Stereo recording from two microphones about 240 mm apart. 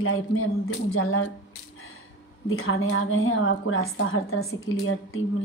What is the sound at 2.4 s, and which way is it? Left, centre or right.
A woman's voice, left.